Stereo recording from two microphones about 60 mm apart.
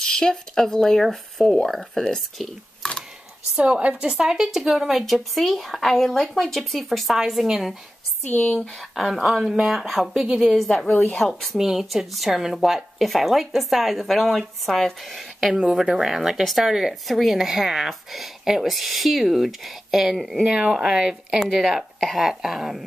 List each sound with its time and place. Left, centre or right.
0.0 s speech: centre
3.5 s speech: right
4.1 s speech: centre
8.3 s speech: left
8.5 s speech: centre
11.5 s speech: centre
20.4 s speech: centre